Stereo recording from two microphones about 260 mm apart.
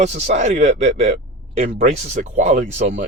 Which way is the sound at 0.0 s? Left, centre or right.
Right.